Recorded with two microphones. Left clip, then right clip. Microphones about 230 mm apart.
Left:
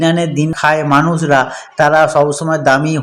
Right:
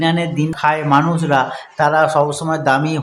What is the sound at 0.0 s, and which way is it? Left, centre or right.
Speech, centre.